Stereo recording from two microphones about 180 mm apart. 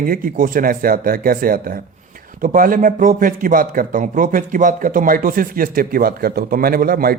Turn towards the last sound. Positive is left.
turn(degrees=-55)  # may be behind; listen again after turning